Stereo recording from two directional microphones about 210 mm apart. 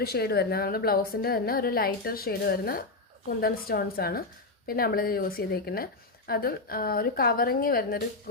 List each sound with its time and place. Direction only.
0.0 s speech: 50° left (ahead or behind)